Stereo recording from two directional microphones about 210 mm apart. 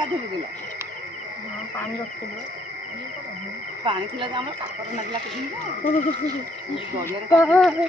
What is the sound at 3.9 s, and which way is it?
Speech, 25° right (ahead or behind).